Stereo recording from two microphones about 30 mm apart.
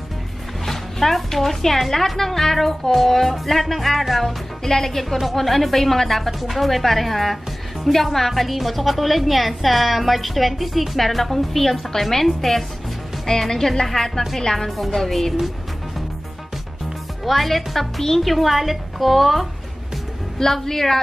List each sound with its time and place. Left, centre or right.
0.7 s speech: centre
4.2 s speech: centre
4.9 s a woman's voice: centre
14.8 s speech: centre
17.2 s a woman's voice: centre
20.3 s speech: centre